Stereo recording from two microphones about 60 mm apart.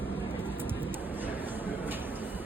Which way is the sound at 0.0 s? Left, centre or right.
Right.